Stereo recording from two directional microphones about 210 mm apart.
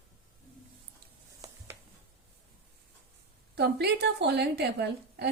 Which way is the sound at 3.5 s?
50° right (ahead or behind).